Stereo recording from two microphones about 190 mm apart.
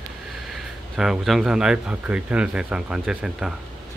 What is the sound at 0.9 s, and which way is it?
Speech, centre (ahead or behind).